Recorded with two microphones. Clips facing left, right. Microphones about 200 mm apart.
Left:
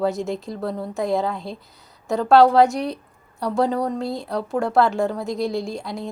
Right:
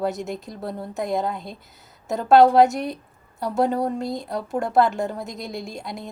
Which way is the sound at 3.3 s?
25° right (ahead or behind).